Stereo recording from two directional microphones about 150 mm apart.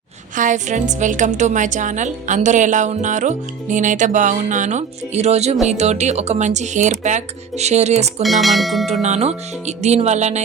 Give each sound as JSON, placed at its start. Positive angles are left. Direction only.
{"t": 0.3, "sound": "a woman's voice", "side_deg": -55}
{"t": 8.2, "sound": "speech", "side_deg": 0}
{"t": 8.9, "sound": "speech", "side_deg": -50}